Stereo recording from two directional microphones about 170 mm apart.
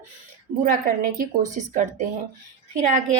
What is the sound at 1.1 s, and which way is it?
A woman's voice, 45° right (ahead or behind).